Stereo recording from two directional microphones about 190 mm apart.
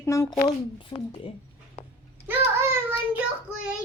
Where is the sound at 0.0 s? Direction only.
15° left (ahead or behind).